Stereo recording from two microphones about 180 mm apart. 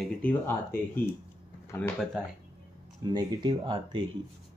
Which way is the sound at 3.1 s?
25° right (ahead or behind).